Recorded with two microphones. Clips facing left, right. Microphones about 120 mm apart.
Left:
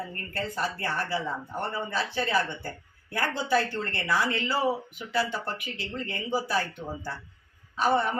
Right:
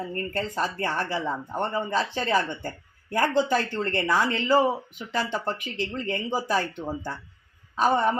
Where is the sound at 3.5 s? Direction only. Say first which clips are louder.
Right 1 dB; 45° right (ahead or behind).